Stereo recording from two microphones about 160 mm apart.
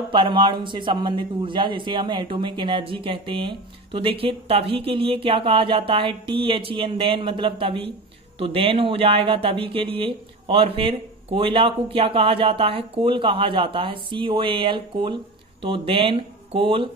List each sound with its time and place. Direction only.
0.1 s speech: 30° right (ahead or behind)